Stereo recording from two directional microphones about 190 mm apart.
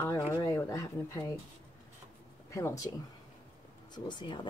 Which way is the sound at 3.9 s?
25° left (ahead or behind).